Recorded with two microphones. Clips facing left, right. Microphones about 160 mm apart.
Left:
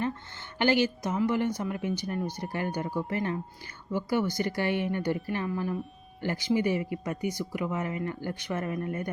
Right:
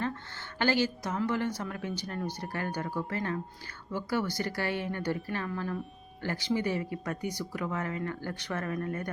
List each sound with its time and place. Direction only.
0.6 s speech: 15° left (ahead or behind)